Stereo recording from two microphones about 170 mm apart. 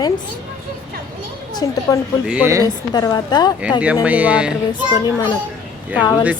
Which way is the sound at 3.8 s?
10° right (ahead or behind).